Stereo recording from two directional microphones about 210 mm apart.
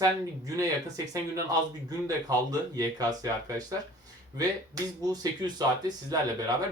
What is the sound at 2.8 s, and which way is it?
Speech, 15° right (ahead or behind).